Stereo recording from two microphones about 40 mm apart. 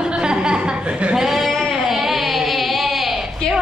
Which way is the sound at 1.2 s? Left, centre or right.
Centre.